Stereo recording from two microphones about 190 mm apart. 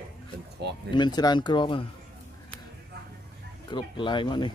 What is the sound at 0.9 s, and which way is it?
Speech, 25° left (ahead or behind).